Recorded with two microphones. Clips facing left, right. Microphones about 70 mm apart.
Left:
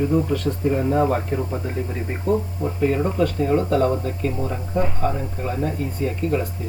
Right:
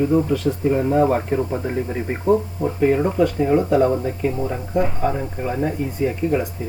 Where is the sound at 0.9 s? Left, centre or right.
Right.